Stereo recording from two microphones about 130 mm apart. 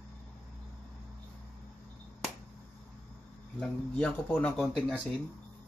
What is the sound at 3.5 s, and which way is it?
Speech, 10° left (ahead or behind).